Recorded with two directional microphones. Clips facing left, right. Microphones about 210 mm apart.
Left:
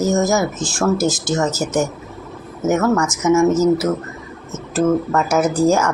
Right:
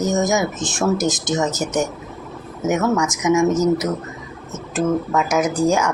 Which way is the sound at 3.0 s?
15° right (ahead or behind).